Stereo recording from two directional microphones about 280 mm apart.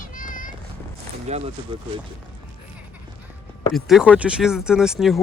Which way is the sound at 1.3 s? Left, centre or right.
Right.